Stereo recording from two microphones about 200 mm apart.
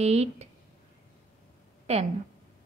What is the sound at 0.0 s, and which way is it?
Speech, 35° right (ahead or behind).